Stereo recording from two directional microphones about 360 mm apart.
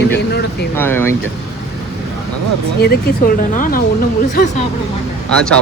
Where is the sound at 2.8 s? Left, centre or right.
Left.